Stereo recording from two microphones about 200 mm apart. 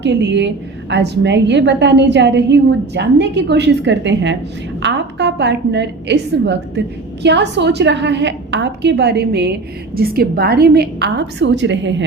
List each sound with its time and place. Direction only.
0.0 s a woman's voice: 60° right (ahead or behind)